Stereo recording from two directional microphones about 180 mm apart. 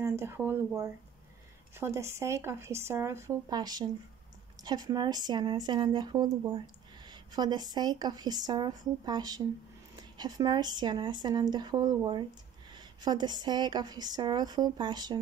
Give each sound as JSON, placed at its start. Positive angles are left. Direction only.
{"t": 0.0, "sound": "speech", "side_deg": -15}